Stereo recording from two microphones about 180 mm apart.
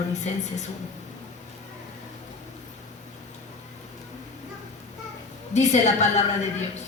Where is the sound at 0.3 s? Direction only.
40° left (ahead or behind).